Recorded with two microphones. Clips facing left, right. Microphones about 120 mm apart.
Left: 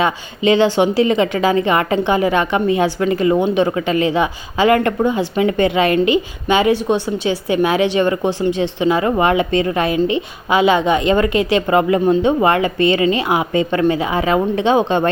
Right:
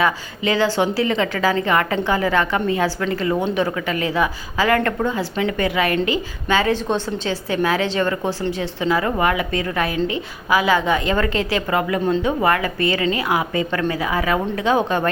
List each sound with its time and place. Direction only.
0.0 s a woman's voice: 20° left (ahead or behind)